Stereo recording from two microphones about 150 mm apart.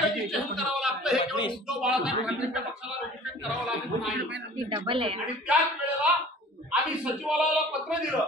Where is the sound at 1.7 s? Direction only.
5° right (ahead or behind).